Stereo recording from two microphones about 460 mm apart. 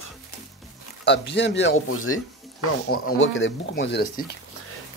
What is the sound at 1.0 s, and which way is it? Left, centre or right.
Speech, left.